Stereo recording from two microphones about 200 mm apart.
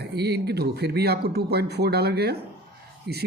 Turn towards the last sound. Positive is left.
turn(degrees=-55)  # may be behind; listen again after turning